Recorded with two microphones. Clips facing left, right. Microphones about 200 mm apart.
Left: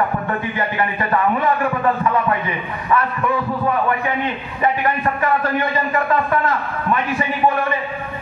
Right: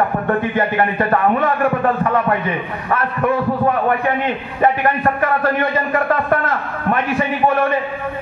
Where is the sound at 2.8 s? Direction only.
50° right (ahead or behind).